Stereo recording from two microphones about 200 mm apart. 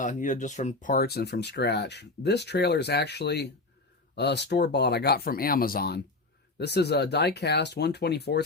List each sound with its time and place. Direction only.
0.0 s speech: 40° left (ahead or behind); by 8.4 s 55° left (ahead or behind)